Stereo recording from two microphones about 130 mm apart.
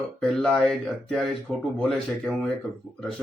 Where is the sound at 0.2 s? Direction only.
5° left (ahead or behind).